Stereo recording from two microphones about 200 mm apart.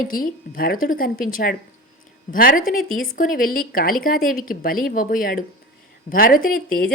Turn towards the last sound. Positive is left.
turn(degrees=45)  # may be behind; listen again after turning